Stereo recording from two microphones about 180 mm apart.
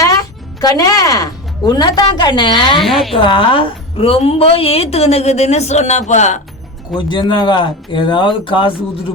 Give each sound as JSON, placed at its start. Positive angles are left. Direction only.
{"t": 0.0, "sound": "speech", "side_deg": 20}
{"t": 2.8, "sound": "a woman's voice", "side_deg": 0}
{"t": 3.2, "sound": "a woman's voice", "side_deg": 30}
{"t": 6.9, "sound": "speech", "side_deg": 25}